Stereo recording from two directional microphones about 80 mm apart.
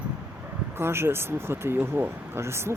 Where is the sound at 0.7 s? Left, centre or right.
Right.